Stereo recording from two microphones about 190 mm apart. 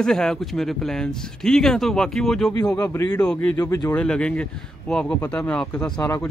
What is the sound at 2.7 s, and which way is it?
Speech, 15° left (ahead or behind).